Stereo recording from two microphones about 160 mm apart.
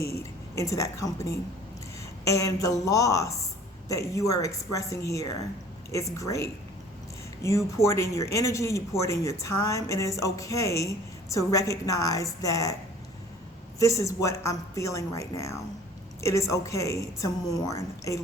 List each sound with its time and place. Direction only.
0.0 s a woman's voice: 20° left (ahead or behind)
13.7 s speech: 20° left (ahead or behind)